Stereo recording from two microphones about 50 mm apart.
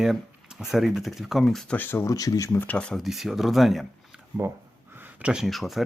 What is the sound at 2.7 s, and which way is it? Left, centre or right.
Speech, centre.